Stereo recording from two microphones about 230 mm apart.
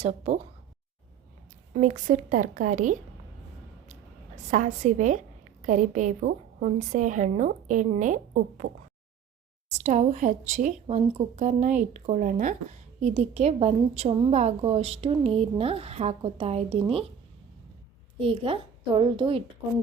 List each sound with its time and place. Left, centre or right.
0.0 s a woman's voice: right
1.7 s a woman's voice: right
4.5 s a woman's voice: right
18.2 s a woman's voice: right